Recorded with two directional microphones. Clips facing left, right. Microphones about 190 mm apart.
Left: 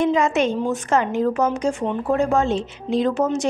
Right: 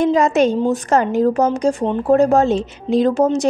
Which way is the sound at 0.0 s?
40° right (ahead or behind).